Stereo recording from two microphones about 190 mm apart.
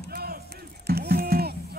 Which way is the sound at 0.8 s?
55° right (ahead or behind).